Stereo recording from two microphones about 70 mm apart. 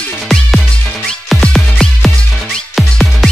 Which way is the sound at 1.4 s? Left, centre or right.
Centre.